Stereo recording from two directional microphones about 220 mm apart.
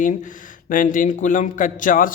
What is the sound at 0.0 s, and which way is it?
A man's voice, 35° left (ahead or behind).